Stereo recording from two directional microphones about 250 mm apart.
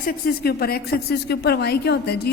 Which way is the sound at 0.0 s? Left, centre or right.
Left.